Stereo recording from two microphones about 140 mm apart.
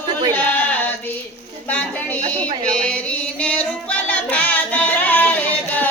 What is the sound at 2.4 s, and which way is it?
Music, 10° left (ahead or behind).